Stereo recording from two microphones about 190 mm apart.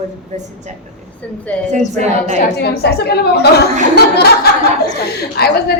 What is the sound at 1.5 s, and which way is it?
Speech, 5° left (ahead or behind).